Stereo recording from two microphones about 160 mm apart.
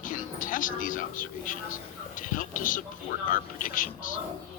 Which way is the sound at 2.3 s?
55° left (ahead or behind).